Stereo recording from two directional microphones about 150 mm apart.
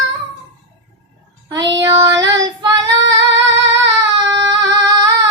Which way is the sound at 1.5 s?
25° right (ahead or behind).